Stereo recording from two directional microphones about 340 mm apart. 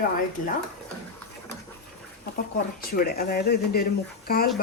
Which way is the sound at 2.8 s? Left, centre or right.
Left.